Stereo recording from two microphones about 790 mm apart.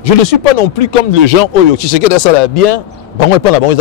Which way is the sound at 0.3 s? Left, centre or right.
Left.